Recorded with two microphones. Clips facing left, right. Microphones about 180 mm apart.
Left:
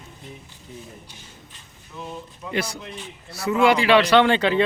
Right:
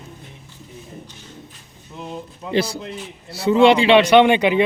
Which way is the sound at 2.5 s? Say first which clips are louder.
Right 6 dB; 30° right (ahead or behind).